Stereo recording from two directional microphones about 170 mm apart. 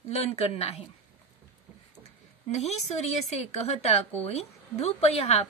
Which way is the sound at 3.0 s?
40° left (ahead or behind).